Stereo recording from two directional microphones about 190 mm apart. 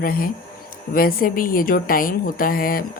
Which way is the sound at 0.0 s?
50° left (ahead or behind).